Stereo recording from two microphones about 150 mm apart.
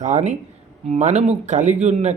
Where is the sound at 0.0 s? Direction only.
55° right (ahead or behind).